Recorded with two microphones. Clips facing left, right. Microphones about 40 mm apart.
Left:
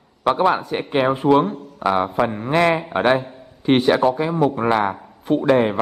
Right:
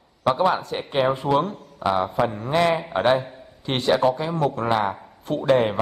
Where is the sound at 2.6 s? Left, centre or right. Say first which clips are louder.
Left 3 dB; centre.